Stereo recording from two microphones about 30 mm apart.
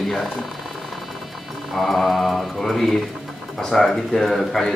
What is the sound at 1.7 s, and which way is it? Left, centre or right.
Speech, centre.